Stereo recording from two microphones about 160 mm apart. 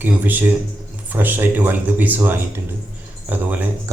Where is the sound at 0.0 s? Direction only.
10° right (ahead or behind).